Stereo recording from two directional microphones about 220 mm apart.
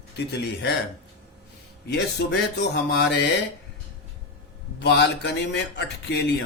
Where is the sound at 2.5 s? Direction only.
50° left (ahead or behind).